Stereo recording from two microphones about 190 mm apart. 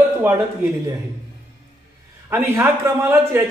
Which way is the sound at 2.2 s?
10° right (ahead or behind).